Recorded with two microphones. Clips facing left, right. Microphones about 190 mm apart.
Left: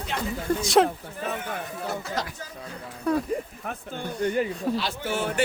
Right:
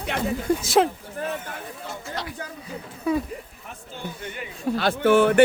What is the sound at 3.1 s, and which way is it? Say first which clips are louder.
Speech: right 1 dB; 5° right (ahead or behind).